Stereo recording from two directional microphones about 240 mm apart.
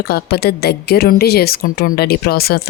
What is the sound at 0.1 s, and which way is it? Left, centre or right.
Speech, left.